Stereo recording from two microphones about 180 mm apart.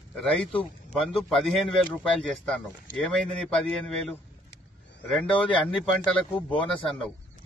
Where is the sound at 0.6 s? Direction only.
30° left (ahead or behind).